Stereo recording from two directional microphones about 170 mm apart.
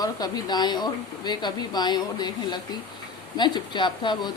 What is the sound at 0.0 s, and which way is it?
Speech, 25° left (ahead or behind).